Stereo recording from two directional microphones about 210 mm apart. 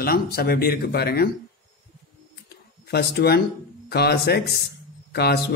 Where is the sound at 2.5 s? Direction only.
50° left (ahead or behind).